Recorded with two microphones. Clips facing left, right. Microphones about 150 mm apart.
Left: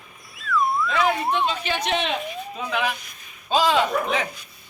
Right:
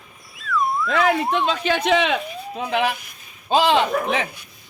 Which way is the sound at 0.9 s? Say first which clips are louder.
Right 3 dB; 70° right (ahead or behind).